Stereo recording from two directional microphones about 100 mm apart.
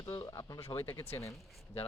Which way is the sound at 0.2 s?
35° left (ahead or behind).